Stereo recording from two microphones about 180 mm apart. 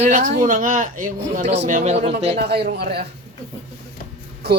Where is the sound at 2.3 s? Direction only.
65° right (ahead or behind).